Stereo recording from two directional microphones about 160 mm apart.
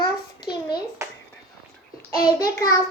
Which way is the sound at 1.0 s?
20° right (ahead or behind).